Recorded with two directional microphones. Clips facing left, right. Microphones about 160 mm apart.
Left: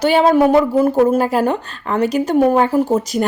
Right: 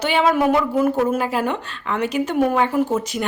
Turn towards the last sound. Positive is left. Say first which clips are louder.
# left 5 dB
turn(degrees=35)  # may be behind; listen again after turning